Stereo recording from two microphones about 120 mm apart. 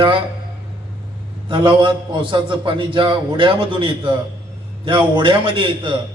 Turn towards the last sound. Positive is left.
turn(degrees=-40)  # may be behind; listen again after turning